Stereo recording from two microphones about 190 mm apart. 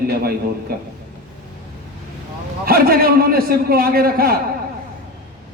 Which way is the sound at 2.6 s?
50° right (ahead or behind).